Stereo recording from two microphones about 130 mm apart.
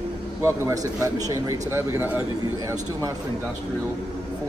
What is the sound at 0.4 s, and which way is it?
Speech, 20° right (ahead or behind).